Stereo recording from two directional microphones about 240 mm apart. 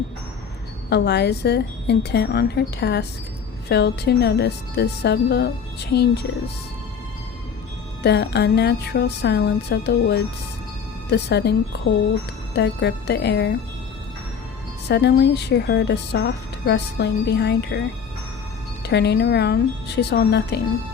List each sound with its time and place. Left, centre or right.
0.9 s speech: left
8.0 s speech: left
14.8 s speech: left
18.9 s speech: left